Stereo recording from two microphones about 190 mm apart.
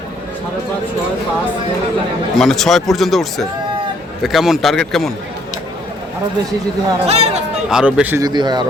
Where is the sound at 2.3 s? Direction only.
Centre (ahead or behind).